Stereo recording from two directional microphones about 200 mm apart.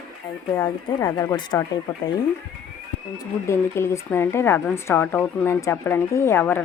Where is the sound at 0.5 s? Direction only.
15° left (ahead or behind).